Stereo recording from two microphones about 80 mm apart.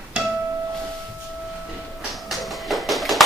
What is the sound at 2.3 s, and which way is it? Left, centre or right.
Music, centre.